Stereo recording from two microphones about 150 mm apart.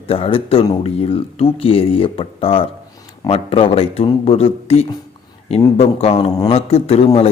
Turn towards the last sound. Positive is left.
turn(degrees=40)  # may be behind; listen again after turning